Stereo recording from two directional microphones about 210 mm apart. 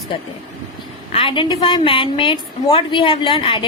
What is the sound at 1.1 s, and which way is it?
A woman's voice, 25° left (ahead or behind).